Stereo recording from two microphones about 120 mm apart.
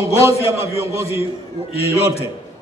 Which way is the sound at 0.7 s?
25° right (ahead or behind).